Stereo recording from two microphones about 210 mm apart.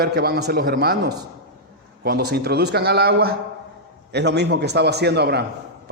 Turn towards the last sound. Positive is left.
turn(degrees=-50)  # may be behind; listen again after turning